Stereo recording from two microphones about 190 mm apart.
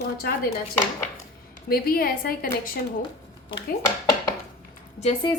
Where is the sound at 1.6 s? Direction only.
50° left (ahead or behind).